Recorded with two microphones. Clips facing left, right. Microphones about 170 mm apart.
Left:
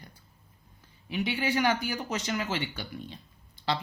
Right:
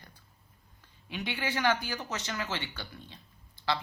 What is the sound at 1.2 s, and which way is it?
Speech, 10° left (ahead or behind).